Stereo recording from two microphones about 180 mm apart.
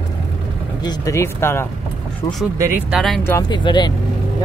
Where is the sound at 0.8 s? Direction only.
15° left (ahead or behind).